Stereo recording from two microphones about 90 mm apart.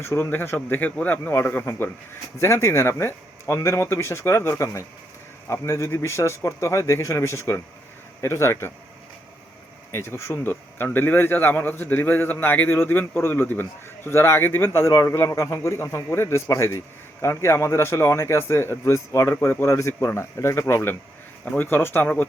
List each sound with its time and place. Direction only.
0.0 s a man's voice: 25° left (ahead or behind)
9.9 s a man's voice: 30° left (ahead or behind)
21.4 s speech: 15° left (ahead or behind)
21.7 s a man's voice: 25° left (ahead or behind)